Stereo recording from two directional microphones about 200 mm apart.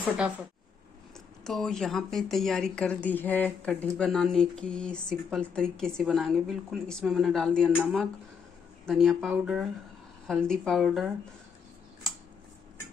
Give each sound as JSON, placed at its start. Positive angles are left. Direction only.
{"t": 1.4, "sound": "a woman's voice", "side_deg": 5}